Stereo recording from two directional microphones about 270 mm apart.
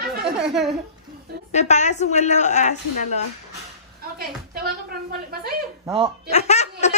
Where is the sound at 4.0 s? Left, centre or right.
Right.